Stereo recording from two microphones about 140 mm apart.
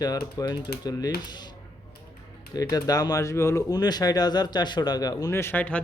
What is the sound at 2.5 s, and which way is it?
Speech, 25° left (ahead or behind).